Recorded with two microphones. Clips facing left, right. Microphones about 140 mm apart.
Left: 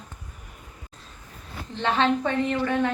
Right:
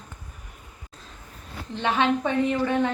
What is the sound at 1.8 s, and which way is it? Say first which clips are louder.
A woman's voice: even; 10° right (ahead or behind).